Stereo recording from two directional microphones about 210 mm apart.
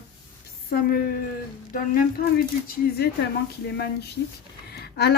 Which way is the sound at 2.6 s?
45° left (ahead or behind).